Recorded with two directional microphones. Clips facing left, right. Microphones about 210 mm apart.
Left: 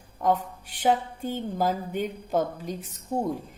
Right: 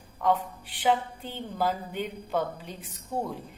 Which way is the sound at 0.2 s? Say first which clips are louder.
Left 1 dB; 45° left (ahead or behind).